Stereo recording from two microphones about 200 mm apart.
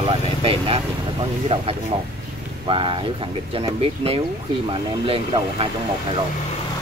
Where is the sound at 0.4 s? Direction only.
25° right (ahead or behind).